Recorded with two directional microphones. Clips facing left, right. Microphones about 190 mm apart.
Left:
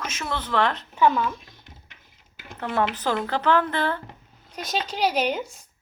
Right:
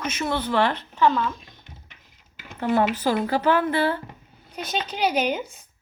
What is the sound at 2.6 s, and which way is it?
A woman's voice, 5° right (ahead or behind).